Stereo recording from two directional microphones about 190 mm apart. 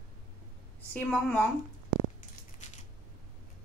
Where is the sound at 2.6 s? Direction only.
40° left (ahead or behind).